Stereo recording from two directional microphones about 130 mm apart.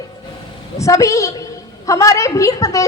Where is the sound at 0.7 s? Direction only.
25° left (ahead or behind).